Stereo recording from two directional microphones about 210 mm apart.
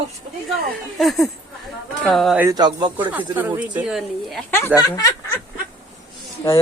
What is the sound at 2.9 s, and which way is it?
Speech, 10° right (ahead or behind).